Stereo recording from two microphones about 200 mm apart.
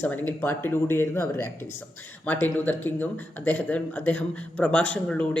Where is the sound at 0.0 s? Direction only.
10° left (ahead or behind).